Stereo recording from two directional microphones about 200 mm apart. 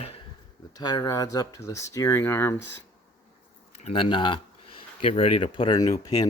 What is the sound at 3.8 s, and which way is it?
Speech, 30° left (ahead or behind).